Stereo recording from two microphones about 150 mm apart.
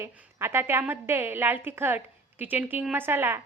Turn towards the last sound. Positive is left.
turn(degrees=-15)  # may be behind; listen again after turning